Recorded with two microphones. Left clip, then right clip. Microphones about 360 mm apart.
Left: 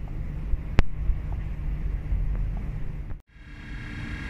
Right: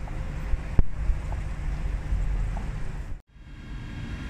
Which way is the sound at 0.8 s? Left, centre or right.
Left.